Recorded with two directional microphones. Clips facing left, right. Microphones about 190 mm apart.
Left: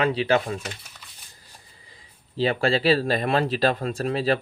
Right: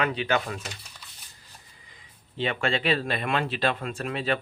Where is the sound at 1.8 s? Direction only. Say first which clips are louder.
Left 2 dB; 35° left (ahead or behind).